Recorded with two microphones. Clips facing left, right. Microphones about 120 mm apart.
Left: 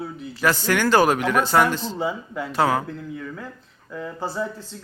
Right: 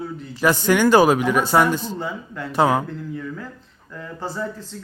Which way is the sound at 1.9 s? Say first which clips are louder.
Left 3 dB; 10° left (ahead or behind).